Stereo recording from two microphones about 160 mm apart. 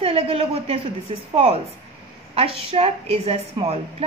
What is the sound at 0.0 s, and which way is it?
A woman's voice, 40° right (ahead or behind).